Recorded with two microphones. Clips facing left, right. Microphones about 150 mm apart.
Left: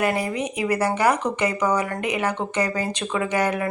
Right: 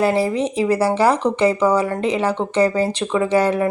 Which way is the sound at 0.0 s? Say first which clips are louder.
Right 6 dB; 30° right (ahead or behind).